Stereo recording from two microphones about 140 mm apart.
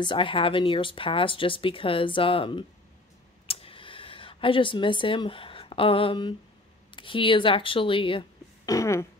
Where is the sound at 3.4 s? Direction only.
45° left (ahead or behind).